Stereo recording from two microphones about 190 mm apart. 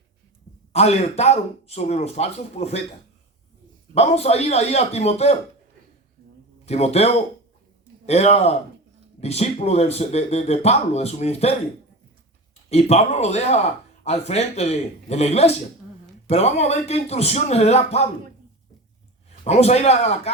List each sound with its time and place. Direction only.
0.7 s speech: 35° left (ahead or behind)
3.9 s speech: 35° left (ahead or behind)
6.7 s speech: 35° left (ahead or behind)
12.7 s speech: 35° left (ahead or behind)
19.5 s speech: 35° left (ahead or behind)